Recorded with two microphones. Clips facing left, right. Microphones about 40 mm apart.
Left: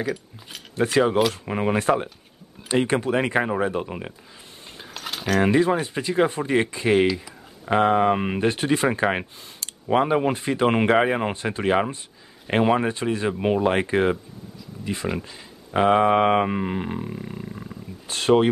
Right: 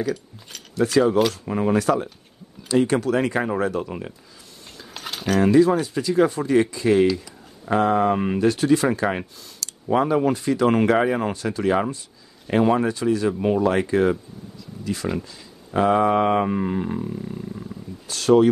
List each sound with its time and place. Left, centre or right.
0.0 s speech: centre
0.7 s speech: left
4.9 s a sound: centre
5.4 s speech: left
14.6 s a sound: centre
15.2 s speech: left